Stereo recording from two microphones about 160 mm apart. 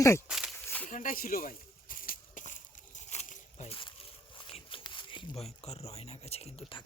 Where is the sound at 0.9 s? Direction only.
55° left (ahead or behind).